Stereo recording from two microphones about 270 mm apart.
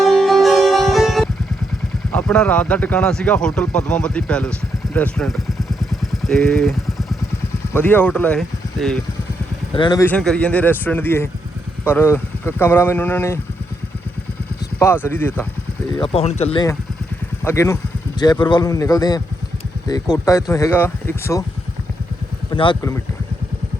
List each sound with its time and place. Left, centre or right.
0.0 s music: centre
2.1 s speech: centre
6.0 s vehicle: centre
7.7 s speech: centre
9.7 s speech: centre
14.8 s speech: centre
16.0 s speech: left
22.4 s speech: centre